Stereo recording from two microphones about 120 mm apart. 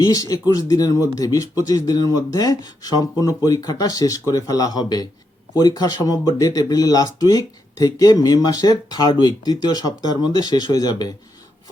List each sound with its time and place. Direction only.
0.0 s speech: 30° left (ahead or behind)